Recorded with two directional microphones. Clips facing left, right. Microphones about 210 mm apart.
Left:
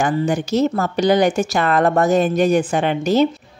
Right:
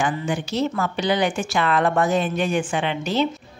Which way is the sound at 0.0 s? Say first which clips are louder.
Left 5 dB; 40° left (ahead or behind).